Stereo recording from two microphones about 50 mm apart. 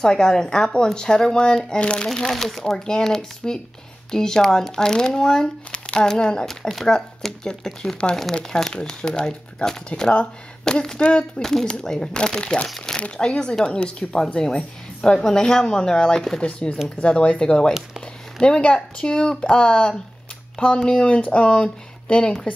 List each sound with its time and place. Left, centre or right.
0.0 s speech: centre
2.2 s speech: centre
13.0 s speech: centre